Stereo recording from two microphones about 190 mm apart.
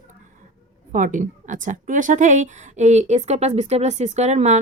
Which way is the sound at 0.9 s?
45° right (ahead or behind).